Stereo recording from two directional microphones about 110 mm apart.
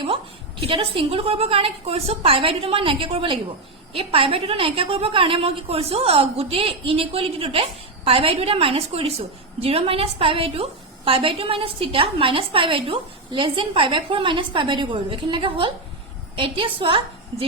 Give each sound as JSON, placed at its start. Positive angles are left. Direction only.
{"t": 0.0, "sound": "a woman's voice", "side_deg": -55}